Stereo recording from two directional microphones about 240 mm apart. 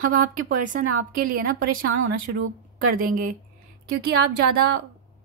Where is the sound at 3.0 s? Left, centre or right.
Right.